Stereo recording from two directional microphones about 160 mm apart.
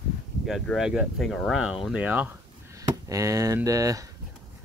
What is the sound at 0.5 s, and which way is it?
Speech, centre (ahead or behind).